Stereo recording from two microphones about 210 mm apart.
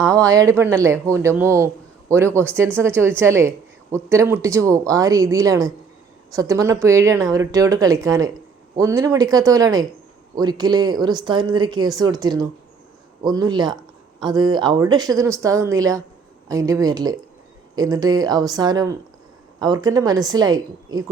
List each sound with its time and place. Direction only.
0.0 s speech: 15° right (ahead or behind)